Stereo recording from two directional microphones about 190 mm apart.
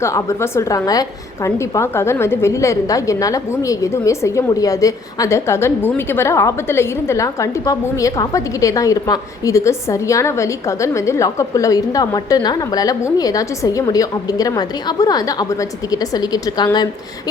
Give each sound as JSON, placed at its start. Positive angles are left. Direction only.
{"t": 0.0, "sound": "a woman's voice", "side_deg": 15}